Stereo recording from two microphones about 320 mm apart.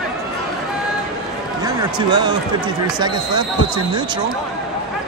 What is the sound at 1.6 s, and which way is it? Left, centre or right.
Basketball bounce, centre.